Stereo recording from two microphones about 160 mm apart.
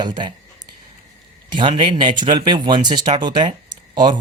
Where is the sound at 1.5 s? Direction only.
30° right (ahead or behind).